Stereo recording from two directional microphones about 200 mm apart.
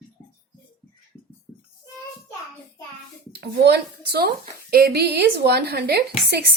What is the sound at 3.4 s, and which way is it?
A woman's voice, 55° right (ahead or behind).